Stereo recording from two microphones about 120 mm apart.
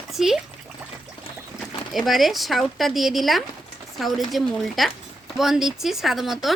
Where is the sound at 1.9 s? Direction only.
Centre (ahead or behind).